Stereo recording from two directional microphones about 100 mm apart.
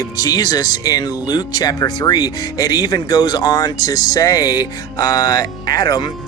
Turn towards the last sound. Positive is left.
turn(degrees=45)  # may be behind; listen again after turning